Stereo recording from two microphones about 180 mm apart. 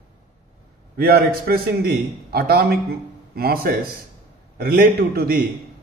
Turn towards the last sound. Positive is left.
turn(degrees=-55)  # may be behind; listen again after turning